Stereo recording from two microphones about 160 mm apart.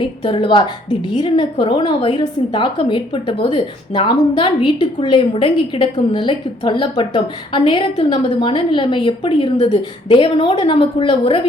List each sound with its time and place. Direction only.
0.0 s a woman's voice: 30° left (ahead or behind)